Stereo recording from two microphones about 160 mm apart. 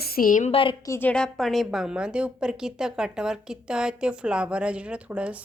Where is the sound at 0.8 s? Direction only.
15° left (ahead or behind).